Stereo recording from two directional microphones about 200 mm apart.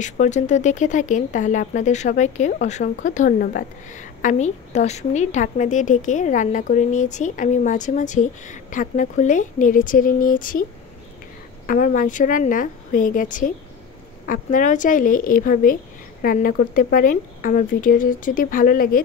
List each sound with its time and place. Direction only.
0.0 s speech: 35° left (ahead or behind)
11.6 s speech: 40° left (ahead or behind)